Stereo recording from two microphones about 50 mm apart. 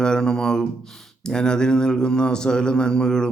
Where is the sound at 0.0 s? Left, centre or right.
Centre.